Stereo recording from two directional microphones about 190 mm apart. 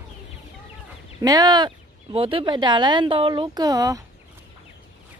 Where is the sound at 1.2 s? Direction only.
20° right (ahead or behind).